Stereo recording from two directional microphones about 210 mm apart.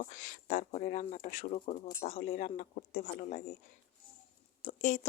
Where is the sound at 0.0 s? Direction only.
40° left (ahead or behind).